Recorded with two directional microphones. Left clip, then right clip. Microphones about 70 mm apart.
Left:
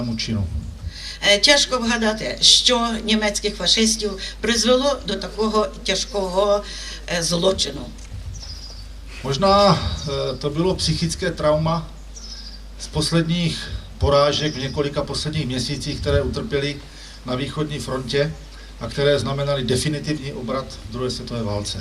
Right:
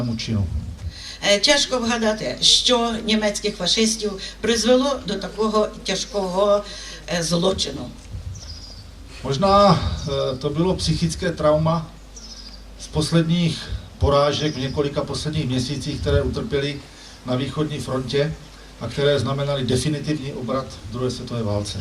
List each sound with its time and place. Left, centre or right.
0.0 s speech: centre
9.2 s speech: left
12.9 s speech: left